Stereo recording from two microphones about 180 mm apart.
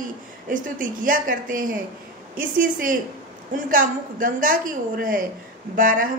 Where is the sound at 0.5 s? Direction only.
50° right (ahead or behind).